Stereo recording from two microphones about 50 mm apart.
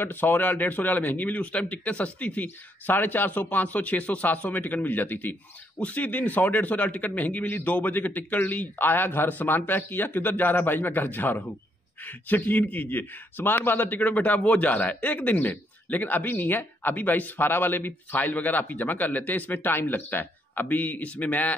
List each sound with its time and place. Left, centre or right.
0.0 s speech: left